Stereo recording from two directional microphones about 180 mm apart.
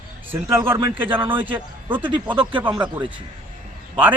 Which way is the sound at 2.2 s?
5° right (ahead or behind).